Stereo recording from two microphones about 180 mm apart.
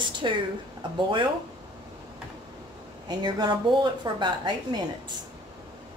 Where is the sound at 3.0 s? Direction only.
25° right (ahead or behind).